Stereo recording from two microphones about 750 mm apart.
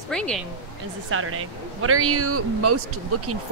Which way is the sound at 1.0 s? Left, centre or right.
Centre.